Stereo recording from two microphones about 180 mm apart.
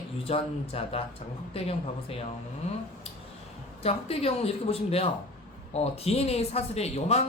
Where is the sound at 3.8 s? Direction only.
35° left (ahead or behind).